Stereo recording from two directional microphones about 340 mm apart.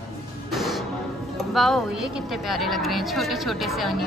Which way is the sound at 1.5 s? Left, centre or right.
Centre.